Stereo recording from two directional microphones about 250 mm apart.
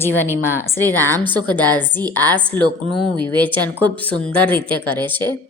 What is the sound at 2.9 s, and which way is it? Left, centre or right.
Speech, left.